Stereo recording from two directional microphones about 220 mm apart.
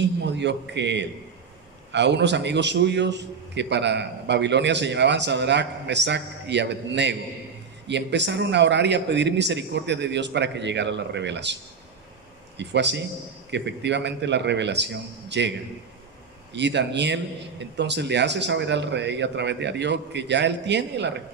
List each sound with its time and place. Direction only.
0.2 s a man's voice: 50° right (ahead or behind)
12.5 s a man's voice: 50° right (ahead or behind)
16.5 s a man's voice: 50° right (ahead or behind)